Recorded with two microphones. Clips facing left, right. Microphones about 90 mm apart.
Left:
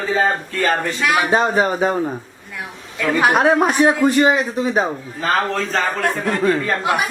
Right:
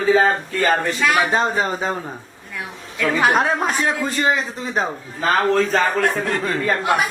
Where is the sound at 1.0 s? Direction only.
10° left (ahead or behind).